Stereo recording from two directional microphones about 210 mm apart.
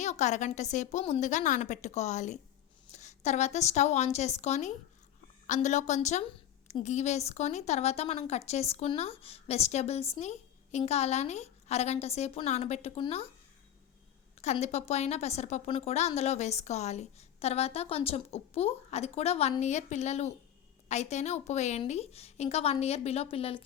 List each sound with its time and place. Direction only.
0.0 s a woman's voice: 35° left (ahead or behind)
14.4 s a woman's voice: 30° left (ahead or behind)